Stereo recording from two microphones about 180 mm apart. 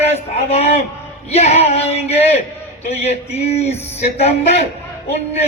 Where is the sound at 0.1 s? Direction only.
35° left (ahead or behind).